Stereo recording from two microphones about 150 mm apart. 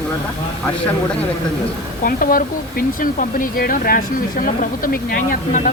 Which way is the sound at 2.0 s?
70° left (ahead or behind).